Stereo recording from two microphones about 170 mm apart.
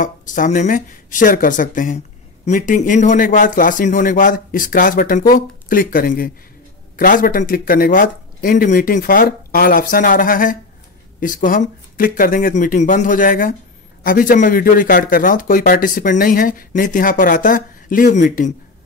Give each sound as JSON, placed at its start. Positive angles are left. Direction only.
{"t": 0.0, "sound": "a man's voice", "side_deg": 50}